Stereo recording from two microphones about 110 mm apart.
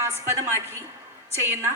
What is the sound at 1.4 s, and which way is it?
Speech, 25° right (ahead or behind).